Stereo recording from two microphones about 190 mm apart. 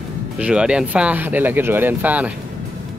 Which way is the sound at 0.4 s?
5° right (ahead or behind).